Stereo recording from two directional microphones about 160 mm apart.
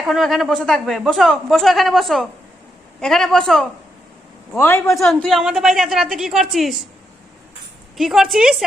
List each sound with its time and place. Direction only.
0.0 s a man's voice: centre (ahead or behind)
4.5 s a man's voice: 15° left (ahead or behind)
4.9 s a man's voice: centre (ahead or behind)
7.9 s a man's voice: centre (ahead or behind)